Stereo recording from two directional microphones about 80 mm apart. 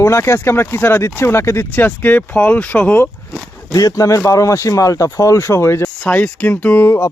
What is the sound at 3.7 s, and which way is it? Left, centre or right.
Speech, left.